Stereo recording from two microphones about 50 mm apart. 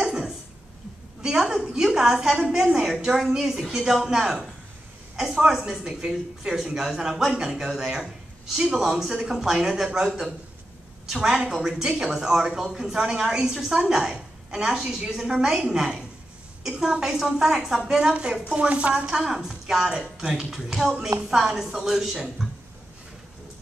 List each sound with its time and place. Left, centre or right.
0.0 s cough: centre
1.2 s a sound: centre
1.8 s a woman's voice: centre